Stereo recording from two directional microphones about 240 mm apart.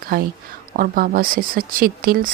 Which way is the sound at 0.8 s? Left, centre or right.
Right.